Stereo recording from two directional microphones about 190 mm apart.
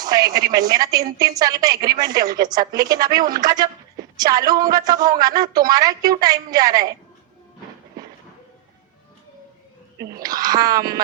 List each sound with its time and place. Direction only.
0.0 s a woman's voice: 20° right (ahead or behind)
10.2 s a woman's voice: 20° right (ahead or behind)